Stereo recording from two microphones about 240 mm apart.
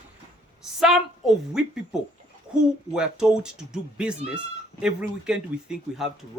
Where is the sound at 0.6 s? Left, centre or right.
Centre.